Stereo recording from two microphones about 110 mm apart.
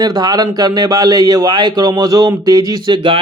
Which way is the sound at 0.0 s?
35° right (ahead or behind).